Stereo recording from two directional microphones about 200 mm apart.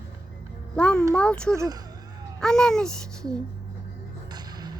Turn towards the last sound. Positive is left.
turn(degrees=-20)  # may be behind; listen again after turning